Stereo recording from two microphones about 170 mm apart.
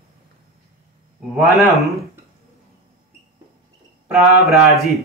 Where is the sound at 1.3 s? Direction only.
Centre (ahead or behind).